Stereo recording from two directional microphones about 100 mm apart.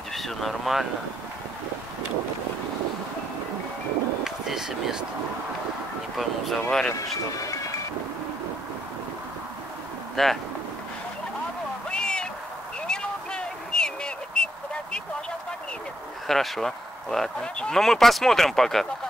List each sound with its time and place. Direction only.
0.1 s speech: centre (ahead or behind)
4.2 s speech: 5° right (ahead or behind)
6.1 s speech: centre (ahead or behind)
6.9 s speech: 35° left (ahead or behind)
10.1 s speech: centre (ahead or behind)
11.9 s a sound: 10° left (ahead or behind)
16.3 s speech: 5° left (ahead or behind)